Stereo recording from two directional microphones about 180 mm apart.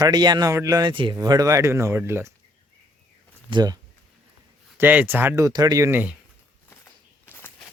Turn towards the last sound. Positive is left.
turn(degrees=10)  # may be behind; listen again after turning